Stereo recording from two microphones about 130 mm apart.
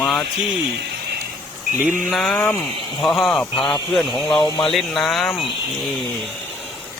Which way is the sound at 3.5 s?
35° left (ahead or behind).